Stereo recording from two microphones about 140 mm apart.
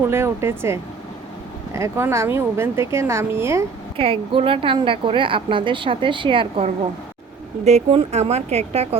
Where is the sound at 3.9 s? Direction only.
40° right (ahead or behind).